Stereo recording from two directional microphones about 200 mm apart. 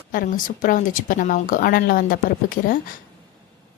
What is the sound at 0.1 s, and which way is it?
A woman's voice, 45° left (ahead or behind).